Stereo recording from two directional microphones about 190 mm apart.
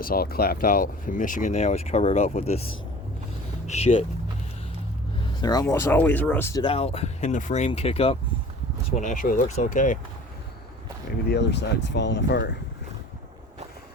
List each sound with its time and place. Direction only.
0.0 s speech: 50° left (ahead or behind); by 2.6 s 35° left (ahead or behind)
3.7 s speech: 35° left (ahead or behind)
5.4 s speech: 20° left (ahead or behind)
6.6 s speech: 30° left (ahead or behind)
9.0 s speech: 40° left (ahead or behind)
11.3 s speech: 65° left (ahead or behind)